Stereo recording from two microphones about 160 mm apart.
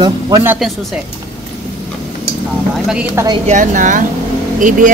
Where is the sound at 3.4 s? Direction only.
50° right (ahead or behind).